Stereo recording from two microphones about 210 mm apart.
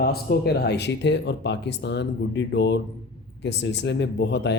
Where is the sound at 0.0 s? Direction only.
50° left (ahead or behind).